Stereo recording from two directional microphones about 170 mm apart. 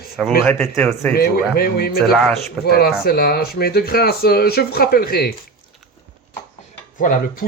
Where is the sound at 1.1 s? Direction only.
65° left (ahead or behind).